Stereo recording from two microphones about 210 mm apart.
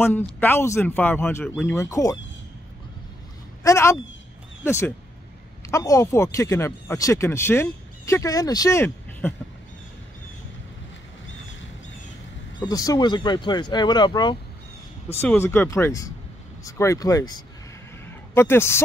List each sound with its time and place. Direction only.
0.0 s speech: 10° left (ahead or behind)
3.6 s speech: 15° left (ahead or behind)
12.5 s speech: 15° left (ahead or behind)